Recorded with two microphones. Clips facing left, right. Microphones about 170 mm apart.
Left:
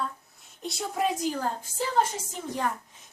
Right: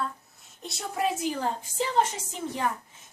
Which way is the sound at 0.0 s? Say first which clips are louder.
Right 1 dB; centre (ahead or behind).